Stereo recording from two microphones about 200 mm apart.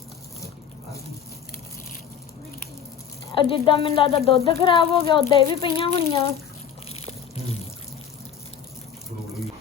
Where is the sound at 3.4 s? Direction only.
25° left (ahead or behind).